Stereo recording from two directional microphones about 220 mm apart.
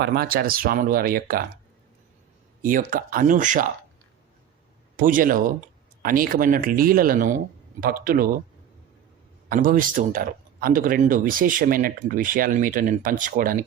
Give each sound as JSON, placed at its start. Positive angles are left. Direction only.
{"t": 0.0, "sound": "speech", "side_deg": -45}
{"t": 2.6, "sound": "speech", "side_deg": -40}
{"t": 4.9, "sound": "speech", "side_deg": -40}
{"t": 9.5, "sound": "speech", "side_deg": -40}